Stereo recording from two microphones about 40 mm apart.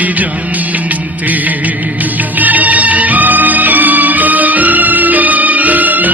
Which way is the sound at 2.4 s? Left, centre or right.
Right.